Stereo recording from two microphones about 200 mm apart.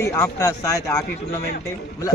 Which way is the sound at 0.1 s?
15° left (ahead or behind).